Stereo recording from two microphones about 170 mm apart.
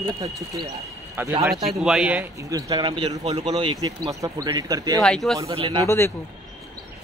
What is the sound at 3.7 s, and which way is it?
A man's voice, 20° right (ahead or behind).